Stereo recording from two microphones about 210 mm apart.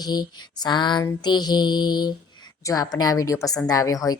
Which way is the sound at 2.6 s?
15° left (ahead or behind).